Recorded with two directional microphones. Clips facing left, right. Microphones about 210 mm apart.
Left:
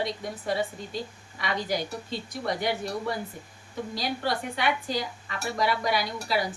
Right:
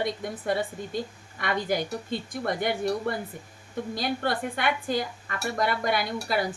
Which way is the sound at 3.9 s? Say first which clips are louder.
Right 1 dB; 55° right (ahead or behind).